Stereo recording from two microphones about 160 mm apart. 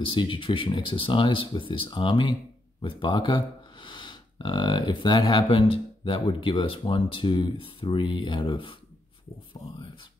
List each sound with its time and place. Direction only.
0.1 s speech: 30° left (ahead or behind)